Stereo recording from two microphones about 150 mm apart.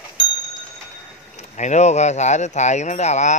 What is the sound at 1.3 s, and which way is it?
Speech, 50° left (ahead or behind).